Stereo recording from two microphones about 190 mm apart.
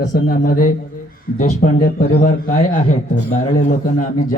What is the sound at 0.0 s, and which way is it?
A man's voice, 50° left (ahead or behind).